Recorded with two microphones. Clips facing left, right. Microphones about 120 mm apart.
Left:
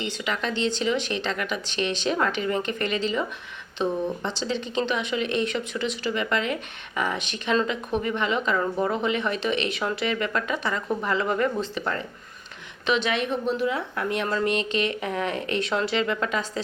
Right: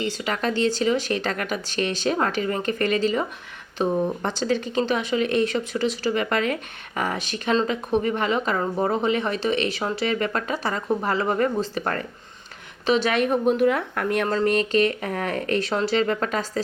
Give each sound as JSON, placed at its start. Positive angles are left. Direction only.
{"t": 0.0, "sound": "speech", "side_deg": -40}